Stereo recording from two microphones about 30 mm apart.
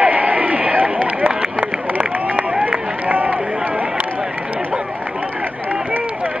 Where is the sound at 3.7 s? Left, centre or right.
Right.